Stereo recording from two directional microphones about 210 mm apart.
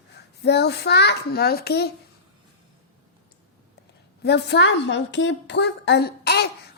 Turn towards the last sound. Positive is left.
turn(degrees=50)  # may be behind; listen again after turning